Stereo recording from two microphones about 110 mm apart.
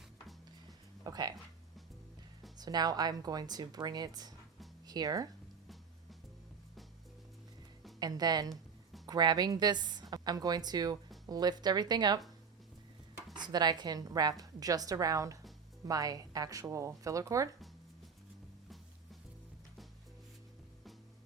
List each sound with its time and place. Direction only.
1.0 s a woman's voice: 35° right (ahead or behind)
2.6 s a woman's voice: 35° right (ahead or behind)
7.9 s a woman's voice: 40° right (ahead or behind)
13.3 s a woman's voice: 40° right (ahead or behind)